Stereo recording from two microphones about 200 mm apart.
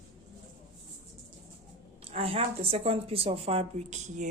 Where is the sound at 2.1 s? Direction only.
30° right (ahead or behind).